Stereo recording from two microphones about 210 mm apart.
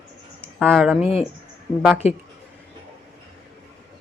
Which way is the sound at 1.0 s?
30° left (ahead or behind).